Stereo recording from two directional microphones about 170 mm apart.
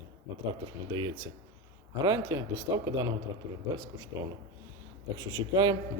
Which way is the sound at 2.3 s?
20° right (ahead or behind).